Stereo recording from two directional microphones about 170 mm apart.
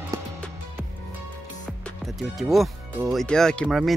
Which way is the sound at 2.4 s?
Centre (ahead or behind).